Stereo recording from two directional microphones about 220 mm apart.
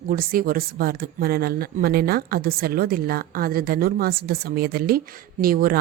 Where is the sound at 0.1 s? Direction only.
40° right (ahead or behind).